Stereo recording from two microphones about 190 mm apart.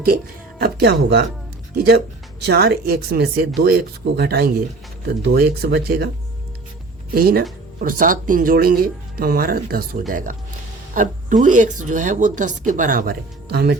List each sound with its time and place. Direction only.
0.6 s speech: 55° right (ahead or behind)
2.5 s speech: 55° right (ahead or behind)
7.1 s a woman's voice: 50° right (ahead or behind)